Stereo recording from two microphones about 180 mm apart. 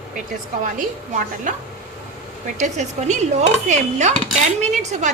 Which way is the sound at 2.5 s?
40° right (ahead or behind).